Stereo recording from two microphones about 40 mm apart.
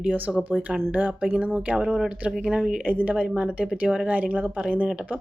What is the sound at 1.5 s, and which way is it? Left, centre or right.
Speech, right.